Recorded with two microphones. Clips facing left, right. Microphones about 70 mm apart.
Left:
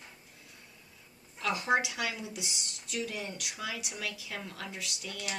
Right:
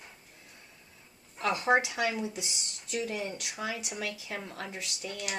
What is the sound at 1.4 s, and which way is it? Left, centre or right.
Speech, right.